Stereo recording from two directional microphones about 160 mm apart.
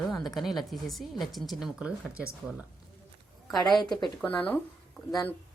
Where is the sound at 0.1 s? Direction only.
Centre (ahead or behind).